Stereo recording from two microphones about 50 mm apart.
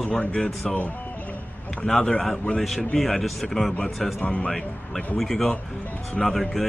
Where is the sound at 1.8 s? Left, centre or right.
Centre.